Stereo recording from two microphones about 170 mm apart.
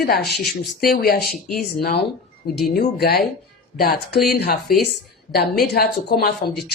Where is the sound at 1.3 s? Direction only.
Centre (ahead or behind).